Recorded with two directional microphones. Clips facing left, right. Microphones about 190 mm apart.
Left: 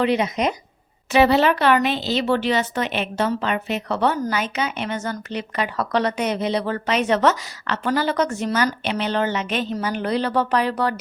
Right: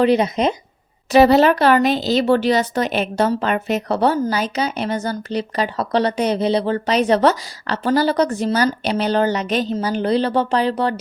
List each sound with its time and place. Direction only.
0.0 s speech: 35° right (ahead or behind)